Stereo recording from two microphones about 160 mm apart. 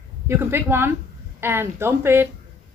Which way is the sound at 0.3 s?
15° right (ahead or behind).